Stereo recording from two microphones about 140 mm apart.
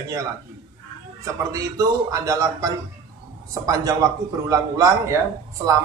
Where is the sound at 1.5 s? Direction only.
25° right (ahead or behind).